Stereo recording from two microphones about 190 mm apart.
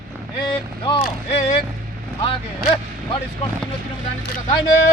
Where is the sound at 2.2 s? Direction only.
25° left (ahead or behind).